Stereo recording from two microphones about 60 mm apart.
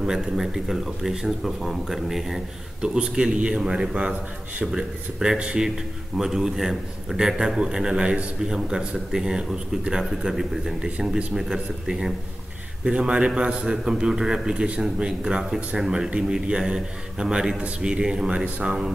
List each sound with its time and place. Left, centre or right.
0.0 s a man's voice: centre